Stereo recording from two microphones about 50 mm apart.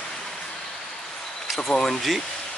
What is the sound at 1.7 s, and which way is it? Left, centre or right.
Speech, centre.